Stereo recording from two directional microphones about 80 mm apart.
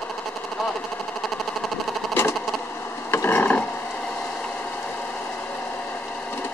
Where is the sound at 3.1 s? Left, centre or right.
Left.